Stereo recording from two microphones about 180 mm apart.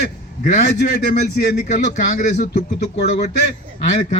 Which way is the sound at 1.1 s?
55° left (ahead or behind).